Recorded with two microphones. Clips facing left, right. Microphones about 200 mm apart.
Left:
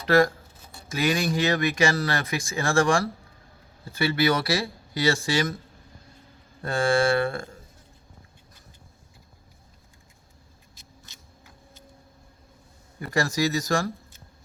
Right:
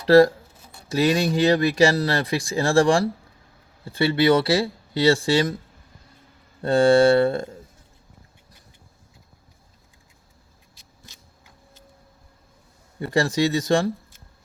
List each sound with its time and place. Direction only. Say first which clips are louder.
0.0 s speech: right 6 dB; 35° right (ahead or behind)
6.6 s speech: right 7 dB; 35° right (ahead or behind)
13.0 s speech: right 4 dB; 30° right (ahead or behind)